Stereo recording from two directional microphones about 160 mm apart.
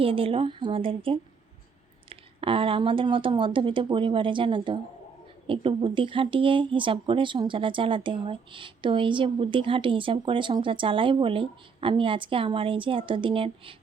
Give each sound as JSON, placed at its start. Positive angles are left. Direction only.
{"t": 0.0, "sound": "speech", "side_deg": -35}